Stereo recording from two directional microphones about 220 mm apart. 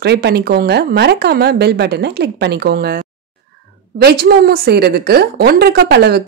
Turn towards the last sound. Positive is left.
turn(degrees=-45)  # may be behind; listen again after turning